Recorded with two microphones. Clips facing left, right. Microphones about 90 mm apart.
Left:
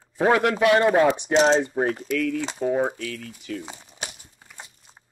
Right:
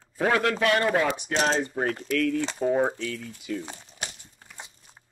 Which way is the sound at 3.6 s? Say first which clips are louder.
Even; 10° left (ahead or behind).